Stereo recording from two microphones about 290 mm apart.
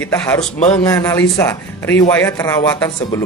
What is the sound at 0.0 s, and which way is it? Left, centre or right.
Speech, centre.